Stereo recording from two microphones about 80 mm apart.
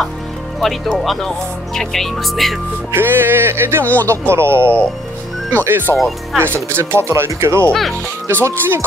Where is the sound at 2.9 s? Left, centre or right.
Right.